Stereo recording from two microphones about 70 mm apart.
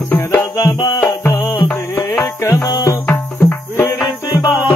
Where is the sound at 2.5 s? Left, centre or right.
Left.